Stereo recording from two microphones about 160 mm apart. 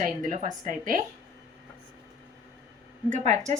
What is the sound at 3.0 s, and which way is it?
Speech, 45° right (ahead or behind).